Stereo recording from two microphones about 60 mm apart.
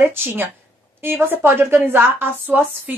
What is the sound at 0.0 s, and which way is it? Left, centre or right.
A woman's voice, right.